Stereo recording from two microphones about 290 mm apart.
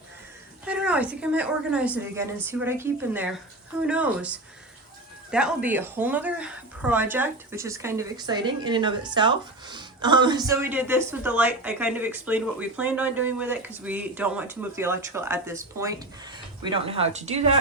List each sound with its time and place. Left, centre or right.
0.6 s a woman's voice: centre; by 17.6 s right